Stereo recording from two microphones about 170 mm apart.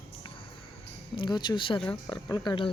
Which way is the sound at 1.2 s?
25° left (ahead or behind).